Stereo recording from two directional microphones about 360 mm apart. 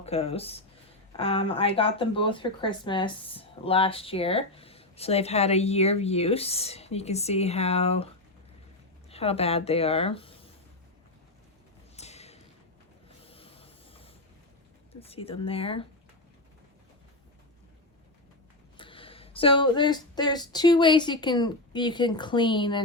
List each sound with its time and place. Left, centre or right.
0.0 s speech: centre
11.9 s a sound: centre
13.1 s printer: centre
15.0 s speech: centre
18.8 s speech: centre